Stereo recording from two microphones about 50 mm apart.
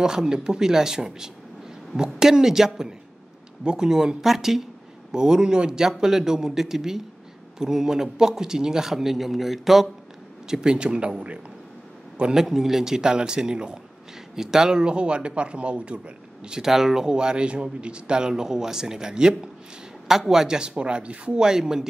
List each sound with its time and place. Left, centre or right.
0.0 s speech: centre
10.5 s speech: centre
16.4 s speech: centre
21.5 s speech: centre